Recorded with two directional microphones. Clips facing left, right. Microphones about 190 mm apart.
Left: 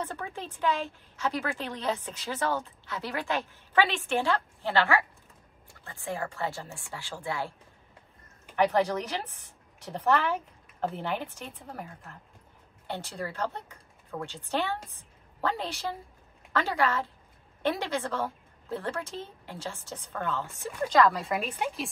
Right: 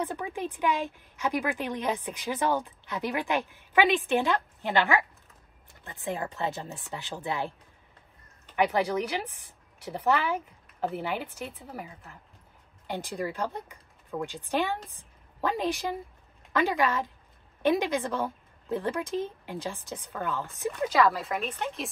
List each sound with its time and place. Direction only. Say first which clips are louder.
0.0 s a woman's voice: right 4 dB; 15° right (ahead or behind)
8.5 s a woman's voice: even; 10° right (ahead or behind); by 21.8 s 10° left (ahead or behind)